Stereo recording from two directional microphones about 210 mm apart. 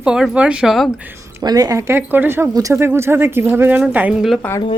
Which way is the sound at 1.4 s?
20° right (ahead or behind).